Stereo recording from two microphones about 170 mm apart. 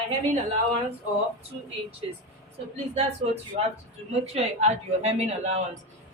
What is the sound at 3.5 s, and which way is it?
A woman's voice, 50° right (ahead or behind).